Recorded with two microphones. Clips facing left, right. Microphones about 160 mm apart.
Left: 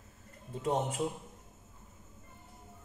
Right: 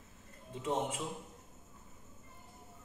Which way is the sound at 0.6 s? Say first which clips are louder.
Left 3 dB; 35° left (ahead or behind).